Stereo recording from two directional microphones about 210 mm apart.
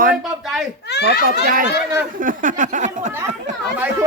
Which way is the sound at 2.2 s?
40° right (ahead or behind).